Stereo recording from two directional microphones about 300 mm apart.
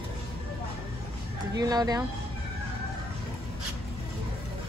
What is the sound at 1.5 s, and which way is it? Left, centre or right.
Speech, centre.